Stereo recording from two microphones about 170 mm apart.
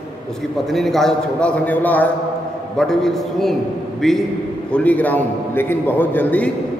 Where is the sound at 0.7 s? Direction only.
Centre (ahead or behind).